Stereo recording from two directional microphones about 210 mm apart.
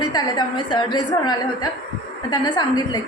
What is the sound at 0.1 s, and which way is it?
A woman's voice, 20° left (ahead or behind).